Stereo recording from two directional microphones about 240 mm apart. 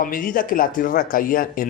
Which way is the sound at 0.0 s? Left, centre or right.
Left.